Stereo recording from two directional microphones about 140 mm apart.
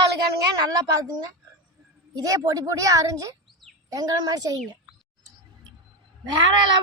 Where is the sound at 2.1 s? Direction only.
25° right (ahead or behind).